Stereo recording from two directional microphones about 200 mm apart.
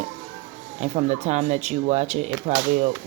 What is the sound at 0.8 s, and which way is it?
Speech, 35° right (ahead or behind).